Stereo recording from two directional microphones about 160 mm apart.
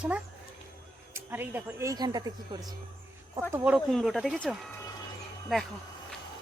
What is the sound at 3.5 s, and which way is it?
Speech, 10° right (ahead or behind).